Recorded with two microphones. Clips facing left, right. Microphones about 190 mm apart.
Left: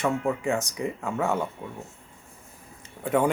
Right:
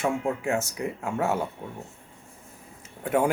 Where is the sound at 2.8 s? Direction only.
5° right (ahead or behind).